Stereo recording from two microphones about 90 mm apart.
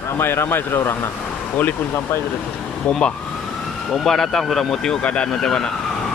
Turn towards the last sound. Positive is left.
turn(degrees=10)  # may be behind; listen again after turning